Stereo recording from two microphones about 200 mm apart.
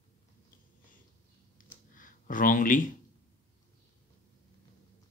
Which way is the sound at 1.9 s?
40° left (ahead or behind).